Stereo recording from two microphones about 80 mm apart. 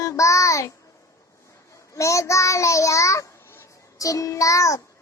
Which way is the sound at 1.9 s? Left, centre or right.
Left.